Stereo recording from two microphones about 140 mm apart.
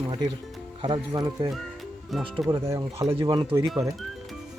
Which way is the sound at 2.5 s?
20° right (ahead or behind).